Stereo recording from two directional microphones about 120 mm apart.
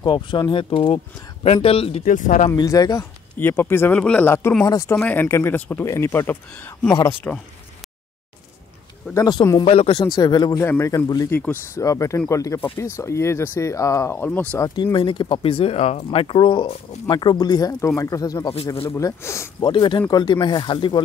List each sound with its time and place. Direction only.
0.0 s speech: 40° left (ahead or behind)
2.0 s speech: 90° left
2.5 s speech: 30° left (ahead or behind)
3.3 s speech: 15° left (ahead or behind)
9.1 s speech: 35° left (ahead or behind)
9.7 s speech: 50° left (ahead or behind)
10.1 s speech: 35° left (ahead or behind)
10.6 s speech: 25° left (ahead or behind)
11.2 s speech: 15° left (ahead or behind)
11.7 s speech: 25° left (ahead or behind)
14.8 s speech: 40° left (ahead or behind); by 19.5 s 25° left (ahead or behind)
19.6 s speech: 40° left (ahead or behind)